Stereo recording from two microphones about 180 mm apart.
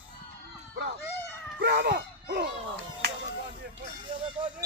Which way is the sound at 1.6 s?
65° right (ahead or behind).